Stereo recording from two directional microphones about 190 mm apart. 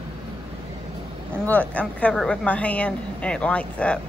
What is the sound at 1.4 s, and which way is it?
A woman's voice, 10° left (ahead or behind).